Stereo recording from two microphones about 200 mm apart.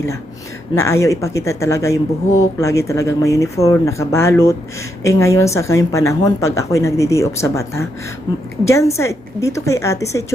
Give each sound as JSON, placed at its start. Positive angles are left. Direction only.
{"t": 0.8, "sound": "a woman's voice", "side_deg": 15}